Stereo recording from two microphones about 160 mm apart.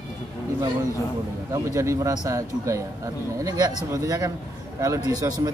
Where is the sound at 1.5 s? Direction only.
20° right (ahead or behind).